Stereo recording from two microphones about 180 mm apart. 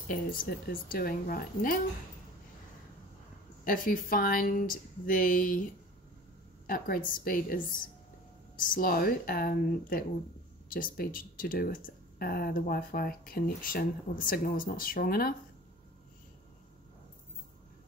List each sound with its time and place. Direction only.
0.1 s speech: 50° left (ahead or behind)
3.6 s speech: 50° left (ahead or behind)
6.7 s speech: 50° left (ahead or behind)